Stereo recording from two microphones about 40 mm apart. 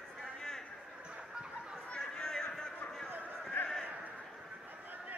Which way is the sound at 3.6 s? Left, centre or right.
Left.